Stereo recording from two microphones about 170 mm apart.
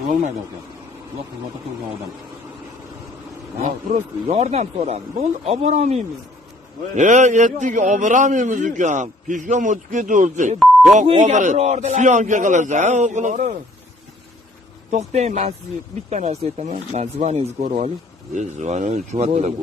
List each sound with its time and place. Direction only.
3.5 s a man's voice: 50° right (ahead or behind)
4.3 s a man's voice: 40° right (ahead or behind)
14.9 s a man's voice: 40° right (ahead or behind)